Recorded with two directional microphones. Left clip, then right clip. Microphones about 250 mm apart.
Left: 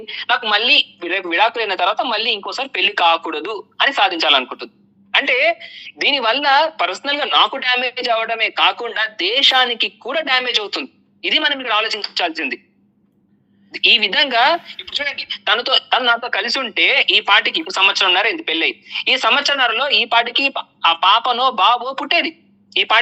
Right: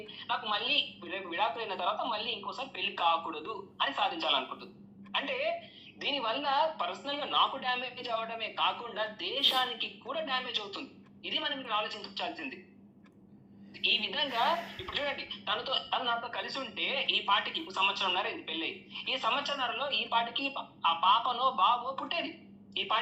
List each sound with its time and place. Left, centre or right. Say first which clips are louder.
0.1 s a woman's voice: left 17 dB; left
13.8 s a woman's voice: left 17 dB; left